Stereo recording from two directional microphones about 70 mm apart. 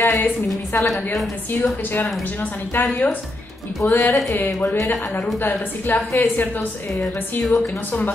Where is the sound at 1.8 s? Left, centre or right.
Left.